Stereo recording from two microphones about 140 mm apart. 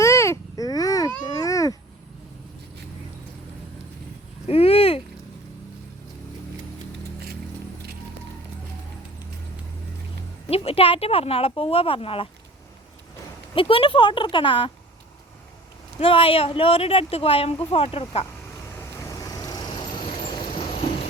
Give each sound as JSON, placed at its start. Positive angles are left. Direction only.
{"t": 0.0, "sound": "babbling", "side_deg": 20}
{"t": 1.3, "sound": "a sound", "side_deg": 25}
{"t": 4.4, "sound": "a sound", "side_deg": 45}
{"t": 10.5, "sound": "speech", "side_deg": 45}
{"t": 13.6, "sound": "speech", "side_deg": 40}
{"t": 16.0, "sound": "speech", "side_deg": 40}
{"t": 19.2, "sound": "vehicle", "side_deg": 30}